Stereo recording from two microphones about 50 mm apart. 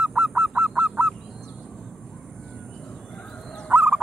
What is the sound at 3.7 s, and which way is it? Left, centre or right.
Fowl, right.